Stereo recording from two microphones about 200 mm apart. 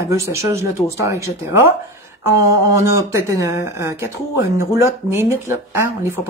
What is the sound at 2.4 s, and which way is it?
Speech, 15° right (ahead or behind).